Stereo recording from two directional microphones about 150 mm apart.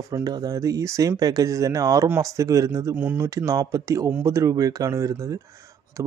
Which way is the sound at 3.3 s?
20° right (ahead or behind).